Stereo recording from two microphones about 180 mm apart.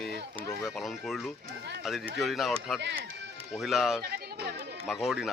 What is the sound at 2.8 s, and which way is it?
Speech, 80° right.